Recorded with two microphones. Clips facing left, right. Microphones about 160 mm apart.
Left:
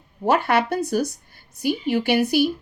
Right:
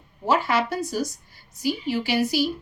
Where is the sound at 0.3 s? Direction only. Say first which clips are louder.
Left 3 dB; 55° left (ahead or behind).